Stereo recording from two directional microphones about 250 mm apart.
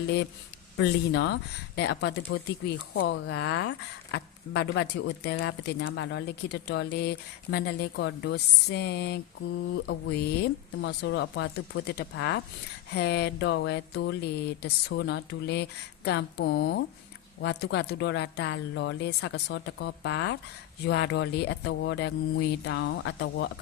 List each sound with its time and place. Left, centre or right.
0.8 s speech: left